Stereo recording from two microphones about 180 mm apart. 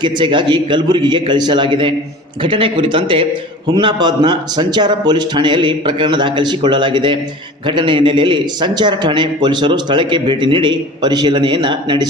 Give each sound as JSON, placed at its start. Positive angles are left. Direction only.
{"t": 0.0, "sound": "a man's voice", "side_deg": -25}